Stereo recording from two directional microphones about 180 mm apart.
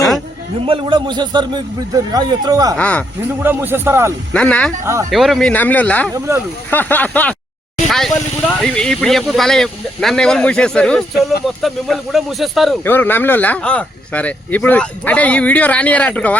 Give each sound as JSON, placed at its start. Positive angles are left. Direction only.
{"t": 0.6, "sound": "a man's voice", "side_deg": -30}
{"t": 2.7, "sound": "speech", "side_deg": 5}
{"t": 3.4, "sound": "speech", "side_deg": -10}
{"t": 4.4, "sound": "speech", "side_deg": 5}
{"t": 6.1, "sound": "speech", "side_deg": -15}
{"t": 6.7, "sound": "speech", "side_deg": 10}
{"t": 12.8, "sound": "speech", "side_deg": 10}